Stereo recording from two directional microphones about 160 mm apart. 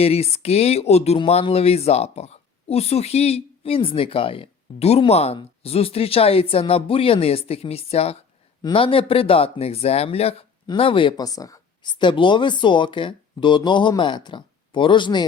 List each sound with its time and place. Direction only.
0.0 s speech: 40° left (ahead or behind)